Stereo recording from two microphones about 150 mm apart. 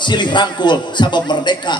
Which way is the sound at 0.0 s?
30° left (ahead or behind).